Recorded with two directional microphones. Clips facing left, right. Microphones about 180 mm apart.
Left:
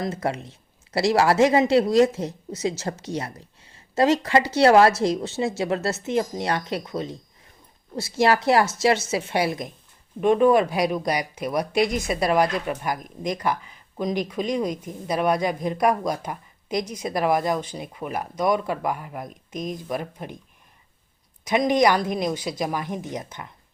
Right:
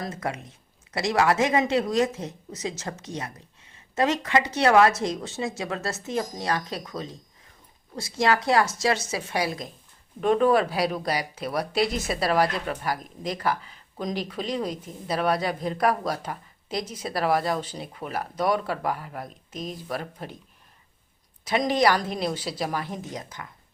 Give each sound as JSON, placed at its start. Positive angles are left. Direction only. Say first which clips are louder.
{"t": 0.0, "sound": "a woman's voice", "louder": "left 5 dB", "side_deg": 30}
{"t": 10.2, "sound": "speech", "louder": "left 3 dB", "side_deg": 10}
{"t": 21.5, "sound": "speech", "louder": "left 3 dB", "side_deg": 15}